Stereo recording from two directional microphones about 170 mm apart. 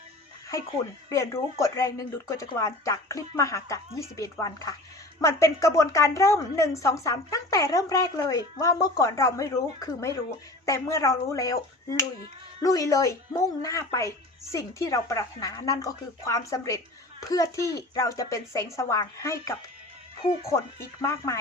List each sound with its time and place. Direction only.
1.1 s a woman's voice: 15° left (ahead or behind)